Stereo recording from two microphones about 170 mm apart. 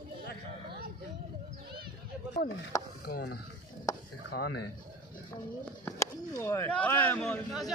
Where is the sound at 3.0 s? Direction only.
65° left (ahead or behind).